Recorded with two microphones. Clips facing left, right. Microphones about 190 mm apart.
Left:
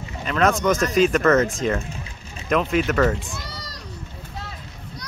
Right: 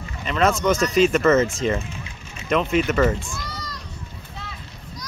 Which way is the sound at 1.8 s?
40° left (ahead or behind).